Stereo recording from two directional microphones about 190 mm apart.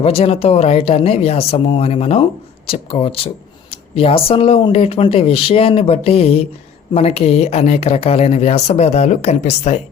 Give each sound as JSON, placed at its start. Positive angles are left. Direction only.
{"t": 0.0, "sound": "speech", "side_deg": 30}